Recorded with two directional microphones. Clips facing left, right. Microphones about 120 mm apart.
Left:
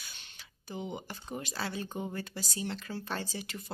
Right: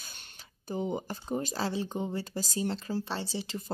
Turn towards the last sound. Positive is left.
turn(degrees=-25)  # may be behind; listen again after turning